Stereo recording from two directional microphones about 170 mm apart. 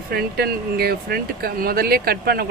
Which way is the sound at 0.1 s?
65° right (ahead or behind).